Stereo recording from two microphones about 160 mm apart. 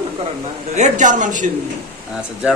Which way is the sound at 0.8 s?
50° right (ahead or behind).